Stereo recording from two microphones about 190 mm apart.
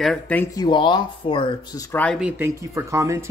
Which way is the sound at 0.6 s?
25° left (ahead or behind).